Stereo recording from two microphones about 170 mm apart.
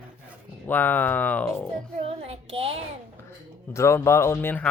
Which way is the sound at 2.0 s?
35° right (ahead or behind).